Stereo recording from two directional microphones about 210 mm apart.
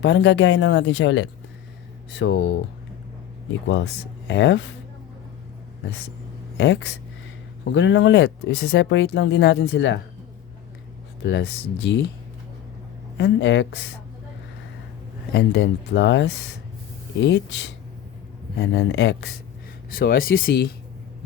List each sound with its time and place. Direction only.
0.0 s speech: 60° left (ahead or behind)
3.7 s speech: 60° left (ahead or behind)
6.6 s speech: 60° left (ahead or behind)
11.2 s speech: 55° left (ahead or behind)
13.1 s speech: 55° left (ahead or behind)
15.3 s speech: 55° left (ahead or behind)
19.9 s speech: 45° left (ahead or behind)